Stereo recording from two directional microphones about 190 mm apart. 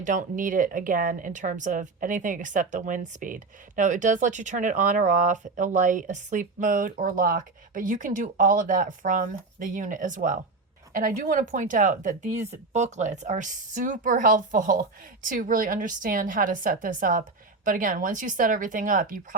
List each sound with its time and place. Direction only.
0.0 s speech: 40° right (ahead or behind)